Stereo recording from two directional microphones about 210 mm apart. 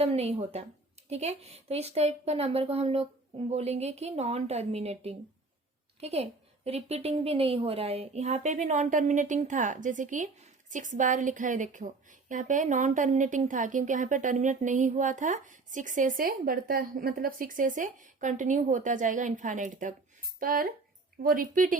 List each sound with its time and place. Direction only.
0.0 s a woman's voice: 30° right (ahead or behind)